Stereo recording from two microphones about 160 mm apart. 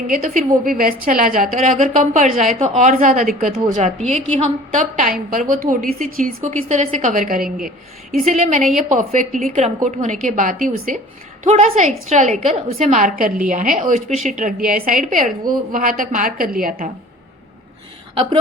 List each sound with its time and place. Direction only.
0.1 s a woman's voice: 55° right (ahead or behind)
8.1 s a woman's voice: 50° right (ahead or behind)